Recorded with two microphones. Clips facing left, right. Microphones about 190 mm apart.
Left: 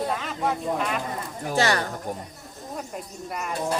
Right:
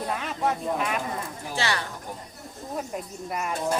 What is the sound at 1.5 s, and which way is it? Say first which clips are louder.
Speech: left 7 dB; 45° left (ahead or behind).